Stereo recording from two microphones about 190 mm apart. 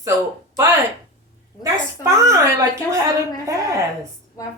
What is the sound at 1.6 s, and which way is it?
A woman's voice, 15° right (ahead or behind).